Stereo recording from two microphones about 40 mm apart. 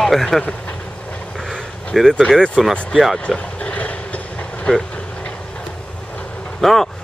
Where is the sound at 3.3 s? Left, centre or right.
Left.